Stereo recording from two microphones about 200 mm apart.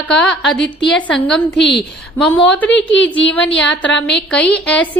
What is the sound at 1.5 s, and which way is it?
Speech, 60° left (ahead or behind).